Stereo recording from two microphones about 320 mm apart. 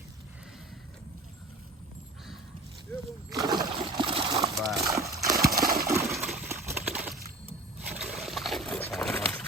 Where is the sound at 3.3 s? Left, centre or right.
Centre.